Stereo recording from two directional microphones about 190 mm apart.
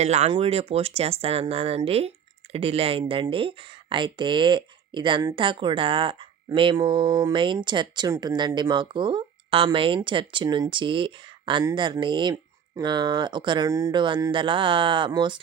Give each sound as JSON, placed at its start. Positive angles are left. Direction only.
{"t": 0.0, "sound": "speech", "side_deg": -35}